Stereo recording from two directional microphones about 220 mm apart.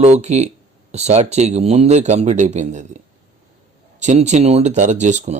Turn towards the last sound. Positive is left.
turn(degrees=-30)  # may be behind; listen again after turning